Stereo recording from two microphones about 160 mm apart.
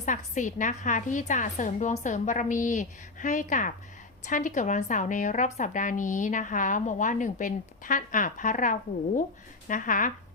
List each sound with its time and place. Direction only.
0.0 s speech: 50° left (ahead or behind)